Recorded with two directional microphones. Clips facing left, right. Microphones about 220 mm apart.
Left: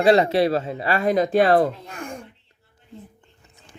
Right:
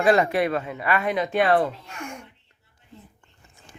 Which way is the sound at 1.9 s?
35° left (ahead or behind).